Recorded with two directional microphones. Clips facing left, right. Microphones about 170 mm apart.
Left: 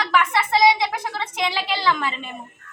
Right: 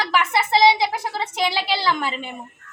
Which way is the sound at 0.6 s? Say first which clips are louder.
Right 1 dB; 30° right (ahead or behind).